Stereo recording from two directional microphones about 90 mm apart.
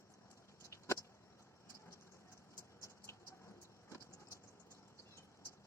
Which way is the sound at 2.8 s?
30° left (ahead or behind).